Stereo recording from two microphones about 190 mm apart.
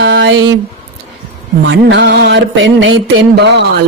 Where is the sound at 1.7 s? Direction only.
70° right (ahead or behind).